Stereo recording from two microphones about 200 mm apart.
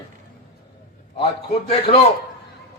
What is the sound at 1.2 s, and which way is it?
Speech, 30° left (ahead or behind).